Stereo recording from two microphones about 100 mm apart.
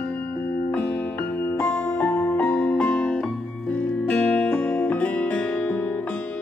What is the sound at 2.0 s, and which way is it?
Music, 20° left (ahead or behind).